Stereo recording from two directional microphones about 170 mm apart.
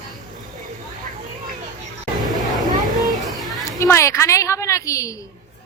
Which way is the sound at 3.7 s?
15° left (ahead or behind).